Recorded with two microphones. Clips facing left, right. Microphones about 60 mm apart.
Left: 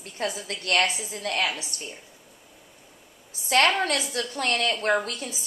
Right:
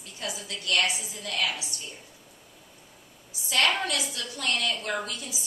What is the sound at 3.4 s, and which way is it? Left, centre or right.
A woman's voice, left.